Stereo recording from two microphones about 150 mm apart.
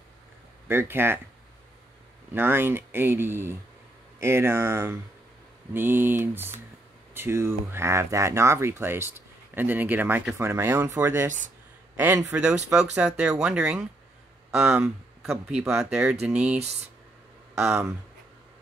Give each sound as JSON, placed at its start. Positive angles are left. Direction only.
{"t": 0.7, "sound": "speech", "side_deg": -15}
{"t": 2.3, "sound": "speech", "side_deg": -15}
{"t": 15.8, "sound": "speech", "side_deg": -5}
{"t": 17.6, "sound": "speech", "side_deg": -20}